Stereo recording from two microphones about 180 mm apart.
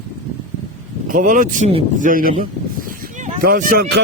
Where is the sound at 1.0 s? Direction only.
50° right (ahead or behind).